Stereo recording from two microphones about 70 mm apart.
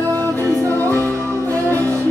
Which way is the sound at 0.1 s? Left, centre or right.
Right.